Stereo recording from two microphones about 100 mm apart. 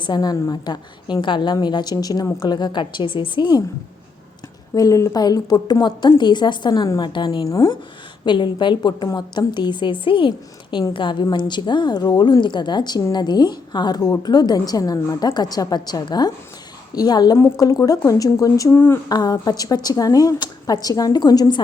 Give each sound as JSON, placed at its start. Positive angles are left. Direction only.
{"t": 0.0, "sound": "a woman's voice", "side_deg": 45}
{"t": 4.7, "sound": "a woman's voice", "side_deg": 35}
{"t": 14.0, "sound": "a woman's voice", "side_deg": 30}
{"t": 14.3, "sound": "a woman's voice", "side_deg": 45}
{"t": 17.3, "sound": "a woman's voice", "side_deg": 30}